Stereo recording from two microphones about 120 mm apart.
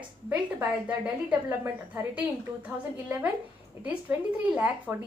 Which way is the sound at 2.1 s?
15° right (ahead or behind).